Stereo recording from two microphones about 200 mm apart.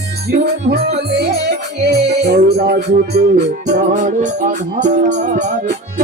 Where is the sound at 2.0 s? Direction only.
35° right (ahead or behind).